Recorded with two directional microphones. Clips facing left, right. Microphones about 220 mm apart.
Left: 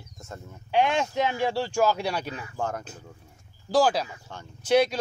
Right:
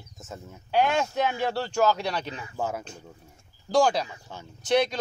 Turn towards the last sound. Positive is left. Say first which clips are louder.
# left 2 dB
turn(degrees=5)  # may be behind; listen again after turning